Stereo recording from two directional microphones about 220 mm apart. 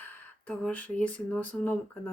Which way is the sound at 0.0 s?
5° left (ahead or behind).